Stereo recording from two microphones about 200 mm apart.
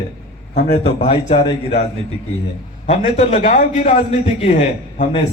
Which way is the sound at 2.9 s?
30° left (ahead or behind).